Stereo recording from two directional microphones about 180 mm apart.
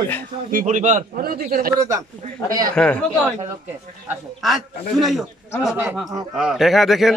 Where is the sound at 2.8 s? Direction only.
5° left (ahead or behind).